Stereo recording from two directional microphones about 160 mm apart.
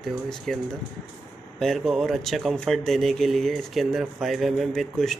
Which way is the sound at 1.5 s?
Centre (ahead or behind).